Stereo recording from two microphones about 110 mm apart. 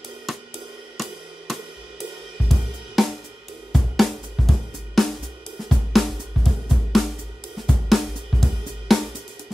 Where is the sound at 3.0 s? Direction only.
Centre (ahead or behind).